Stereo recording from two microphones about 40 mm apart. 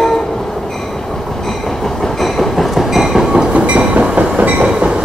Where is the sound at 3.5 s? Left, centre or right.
Right.